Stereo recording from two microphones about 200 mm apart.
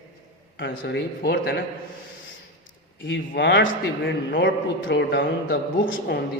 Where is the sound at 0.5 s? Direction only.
60° left (ahead or behind).